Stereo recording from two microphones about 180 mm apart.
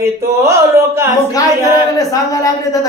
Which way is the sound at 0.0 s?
15° right (ahead or behind).